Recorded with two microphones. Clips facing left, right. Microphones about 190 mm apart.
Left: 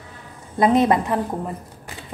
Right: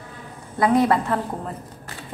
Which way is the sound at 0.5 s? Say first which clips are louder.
Left 2 dB; 20° left (ahead or behind).